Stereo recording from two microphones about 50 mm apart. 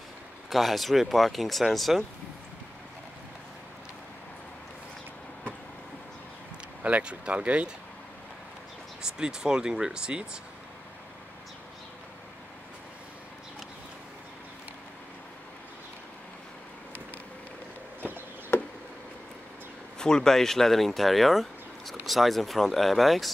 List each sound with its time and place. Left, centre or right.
0.5 s speech: centre
6.8 s speech: right
9.0 s speech: centre
20.0 s speech: centre